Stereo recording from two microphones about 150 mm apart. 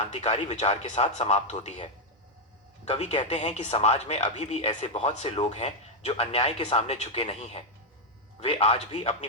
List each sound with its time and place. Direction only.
0.0 s speech: 45° left (ahead or behind)